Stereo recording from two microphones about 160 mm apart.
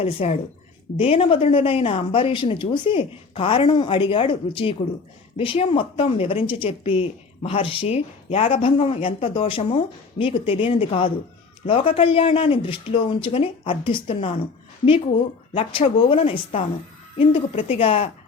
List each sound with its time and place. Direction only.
0.0 s a woman's voice: 40° left (ahead or behind)
15.5 s a woman's voice: 35° left (ahead or behind)